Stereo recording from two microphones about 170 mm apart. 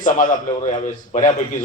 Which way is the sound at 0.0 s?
50° left (ahead or behind).